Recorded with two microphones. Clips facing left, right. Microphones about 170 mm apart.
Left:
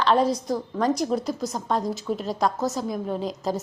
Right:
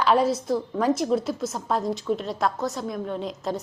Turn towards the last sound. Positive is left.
turn(degrees=0)  # may be behind; listen again after turning